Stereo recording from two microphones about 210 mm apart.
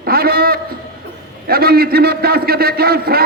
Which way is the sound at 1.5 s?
45° right (ahead or behind).